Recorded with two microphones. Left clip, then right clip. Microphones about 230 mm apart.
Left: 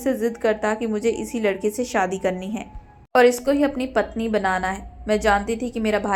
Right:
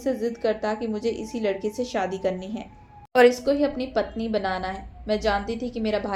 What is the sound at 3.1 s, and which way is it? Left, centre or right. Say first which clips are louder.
Speech: left 1 dB; centre.